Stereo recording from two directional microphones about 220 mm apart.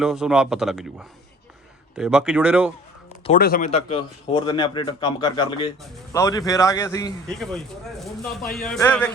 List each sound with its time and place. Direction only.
0.0 s speech: centre (ahead or behind)
3.3 s speech: 40° left (ahead or behind)
3.7 s a man's voice: 30° left (ahead or behind)
7.3 s speech: centre (ahead or behind)